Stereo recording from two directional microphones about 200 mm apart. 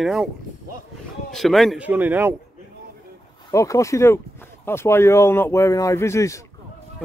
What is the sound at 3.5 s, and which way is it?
Speech, 15° left (ahead or behind).